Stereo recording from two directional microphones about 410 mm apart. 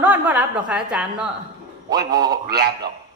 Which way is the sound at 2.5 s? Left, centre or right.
Right.